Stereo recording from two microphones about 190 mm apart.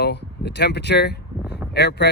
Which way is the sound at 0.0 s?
60° left (ahead or behind).